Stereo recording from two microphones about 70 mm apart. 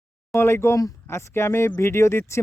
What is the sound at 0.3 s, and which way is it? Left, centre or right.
Speech, left.